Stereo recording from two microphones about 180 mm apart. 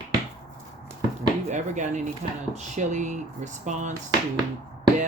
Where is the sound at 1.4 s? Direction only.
40° right (ahead or behind).